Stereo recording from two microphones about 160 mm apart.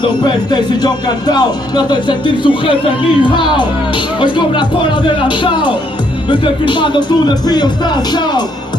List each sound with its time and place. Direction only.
0.0 s music: 30° left (ahead or behind)